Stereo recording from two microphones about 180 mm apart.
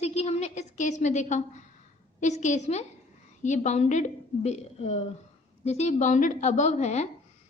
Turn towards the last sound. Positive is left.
turn(degrees=40)  # may be behind; listen again after turning